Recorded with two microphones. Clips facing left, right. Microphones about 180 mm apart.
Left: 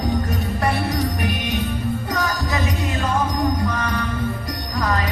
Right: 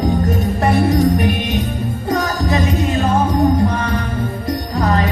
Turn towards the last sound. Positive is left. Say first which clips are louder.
# right 6 dB
turn(degrees=-30)  # may be behind; listen again after turning